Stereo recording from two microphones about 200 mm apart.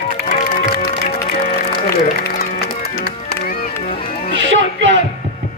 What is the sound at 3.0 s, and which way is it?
Music, 50° left (ahead or behind).